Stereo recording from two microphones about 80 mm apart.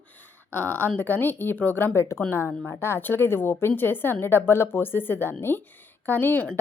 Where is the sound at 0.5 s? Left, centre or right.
Left.